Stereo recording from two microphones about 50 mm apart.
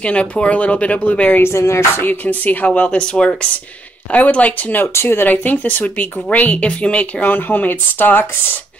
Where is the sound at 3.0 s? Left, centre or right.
Centre.